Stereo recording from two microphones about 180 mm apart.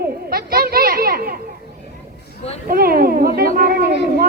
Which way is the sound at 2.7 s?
55° right (ahead or behind).